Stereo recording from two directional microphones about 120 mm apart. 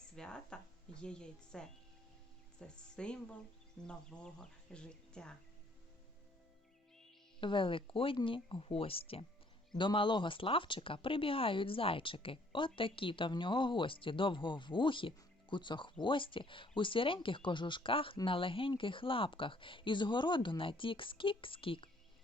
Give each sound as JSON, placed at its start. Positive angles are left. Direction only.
{"t": 0.2, "sound": "speech", "side_deg": 5}
{"t": 7.4, "sound": "speech", "side_deg": 45}